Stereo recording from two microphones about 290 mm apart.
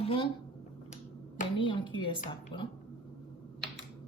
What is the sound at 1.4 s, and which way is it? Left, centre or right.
Speech, centre.